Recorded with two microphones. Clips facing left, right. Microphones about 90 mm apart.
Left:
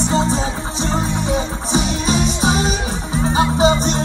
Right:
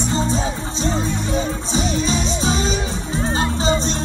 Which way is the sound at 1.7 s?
20° left (ahead or behind).